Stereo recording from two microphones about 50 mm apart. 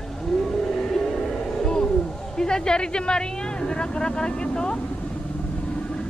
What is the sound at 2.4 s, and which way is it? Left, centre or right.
Speech, centre.